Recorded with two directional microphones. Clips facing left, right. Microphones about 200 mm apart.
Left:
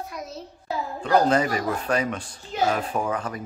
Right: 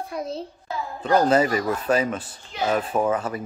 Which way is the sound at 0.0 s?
30° right (ahead or behind).